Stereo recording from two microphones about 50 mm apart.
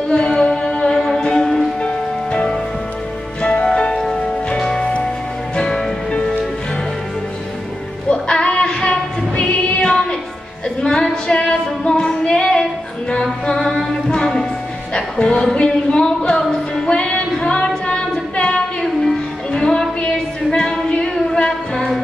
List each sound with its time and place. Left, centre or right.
0.1 s music: centre
3.4 s music: centre
8.1 s music: centre
10.8 s female singing: centre
13.1 s music: centre